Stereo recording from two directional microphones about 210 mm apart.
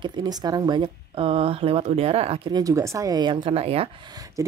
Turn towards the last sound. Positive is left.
turn(degrees=-15)  # may be behind; listen again after turning